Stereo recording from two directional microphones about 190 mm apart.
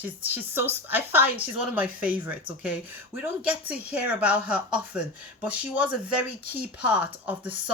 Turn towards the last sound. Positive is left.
turn(degrees=-10)  # may be behind; listen again after turning